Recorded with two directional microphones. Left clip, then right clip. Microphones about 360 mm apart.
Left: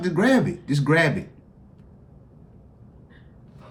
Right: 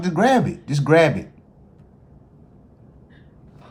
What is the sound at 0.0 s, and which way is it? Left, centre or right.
Speech, centre.